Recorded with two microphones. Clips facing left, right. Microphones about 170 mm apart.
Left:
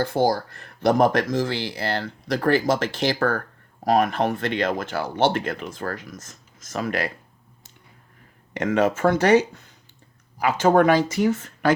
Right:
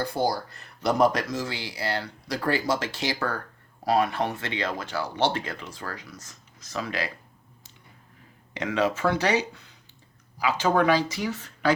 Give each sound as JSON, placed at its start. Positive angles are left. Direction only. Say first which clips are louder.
{"t": 0.1, "sound": "speech", "louder": "left 5 dB", "side_deg": 50}
{"t": 8.5, "sound": "speech", "louder": "left 5 dB", "side_deg": 50}